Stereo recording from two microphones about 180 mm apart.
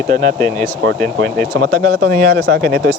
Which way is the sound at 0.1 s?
45° right (ahead or behind).